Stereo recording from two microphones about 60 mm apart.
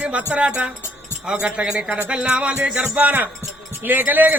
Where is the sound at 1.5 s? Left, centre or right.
Centre.